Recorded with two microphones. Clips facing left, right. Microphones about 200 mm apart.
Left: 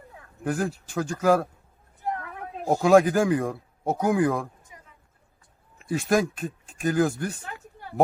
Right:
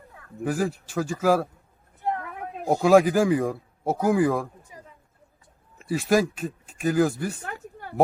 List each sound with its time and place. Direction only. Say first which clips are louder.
0.4 s a man's voice: right 1 dB; centre (ahead or behind)
2.1 s a sound: right 2 dB; 20° right (ahead or behind)
2.8 s a man's voice: right 1 dB; centre (ahead or behind)
5.8 s a man's voice: right 1 dB; centre (ahead or behind)